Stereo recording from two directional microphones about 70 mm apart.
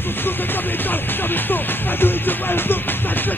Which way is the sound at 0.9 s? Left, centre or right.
Left.